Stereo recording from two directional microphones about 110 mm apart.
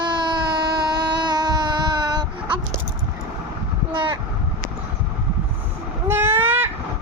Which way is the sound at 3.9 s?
45° right (ahead or behind).